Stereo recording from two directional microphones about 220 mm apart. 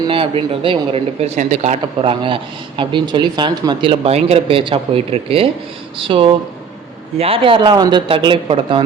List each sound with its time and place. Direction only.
0.1 s speech: 25° right (ahead or behind)